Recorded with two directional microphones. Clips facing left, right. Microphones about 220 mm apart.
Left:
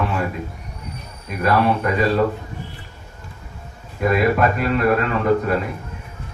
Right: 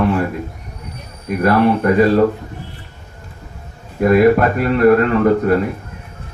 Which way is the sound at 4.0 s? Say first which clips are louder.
Right 6 dB; 45° right (ahead or behind).